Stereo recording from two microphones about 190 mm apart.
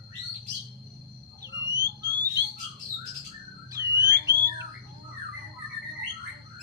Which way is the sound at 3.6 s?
20° right (ahead or behind).